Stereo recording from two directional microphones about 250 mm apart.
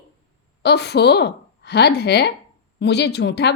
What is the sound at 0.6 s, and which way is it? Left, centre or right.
A woman's voice, left.